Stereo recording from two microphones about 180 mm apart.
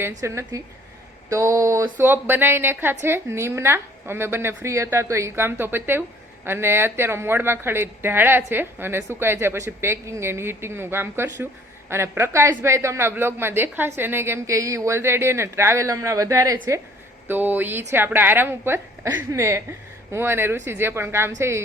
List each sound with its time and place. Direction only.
0.2 s speech: 15° right (ahead or behind)